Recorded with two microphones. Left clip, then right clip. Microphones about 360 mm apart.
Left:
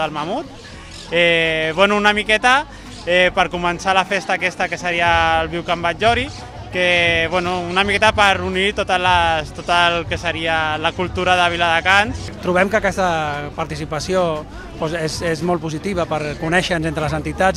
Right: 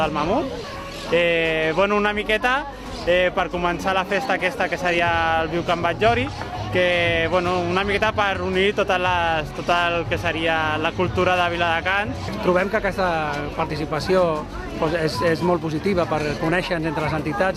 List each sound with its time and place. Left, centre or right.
0.0 s speech: left